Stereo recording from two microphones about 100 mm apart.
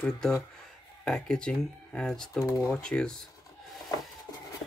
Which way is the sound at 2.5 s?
30° left (ahead or behind).